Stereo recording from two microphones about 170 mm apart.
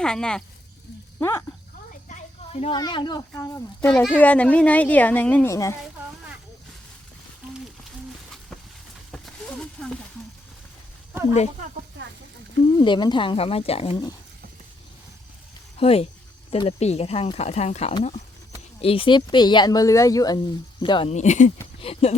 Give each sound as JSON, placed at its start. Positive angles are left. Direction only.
{"t": 0.0, "sound": "speech", "side_deg": 5}
{"t": 1.2, "sound": "a woman's voice", "side_deg": 15}
{"t": 1.9, "sound": "a sound", "side_deg": 45}
{"t": 2.7, "sound": "speech", "side_deg": 25}
{"t": 3.8, "sound": "a woman's voice", "side_deg": 5}
{"t": 9.1, "sound": "a sound", "side_deg": 0}
{"t": 12.7, "sound": "speech", "side_deg": 25}
{"t": 15.8, "sound": "speech", "side_deg": 35}
{"t": 21.1, "sound": "speech", "side_deg": 45}
{"t": 21.8, "sound": "speech", "side_deg": 35}